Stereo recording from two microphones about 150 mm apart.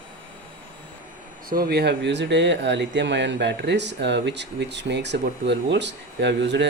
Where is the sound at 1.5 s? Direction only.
85° right.